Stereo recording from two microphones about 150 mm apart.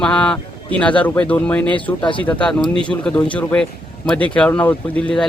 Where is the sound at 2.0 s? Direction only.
35° left (ahead or behind).